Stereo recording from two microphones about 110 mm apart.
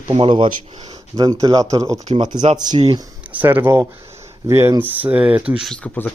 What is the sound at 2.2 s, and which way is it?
Speech, 40° right (ahead or behind).